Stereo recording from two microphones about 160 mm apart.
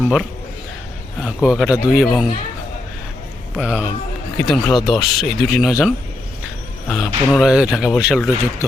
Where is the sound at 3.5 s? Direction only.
5° right (ahead or behind).